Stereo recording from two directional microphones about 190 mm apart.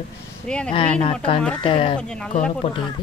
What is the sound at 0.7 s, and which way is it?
Speech, 30° left (ahead or behind).